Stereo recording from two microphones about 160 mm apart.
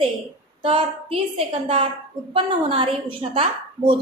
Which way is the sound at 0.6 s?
35° right (ahead or behind).